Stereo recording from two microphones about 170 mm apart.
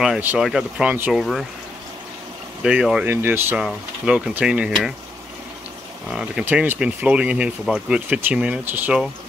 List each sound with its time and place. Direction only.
0.0 s speech: 5° right (ahead or behind)
2.6 s speech: 5° right (ahead or behind)
6.1 s speech: 5° right (ahead or behind)